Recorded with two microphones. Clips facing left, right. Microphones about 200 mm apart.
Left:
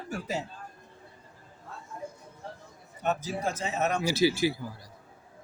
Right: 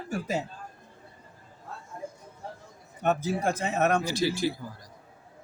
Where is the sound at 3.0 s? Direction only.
55° right (ahead or behind).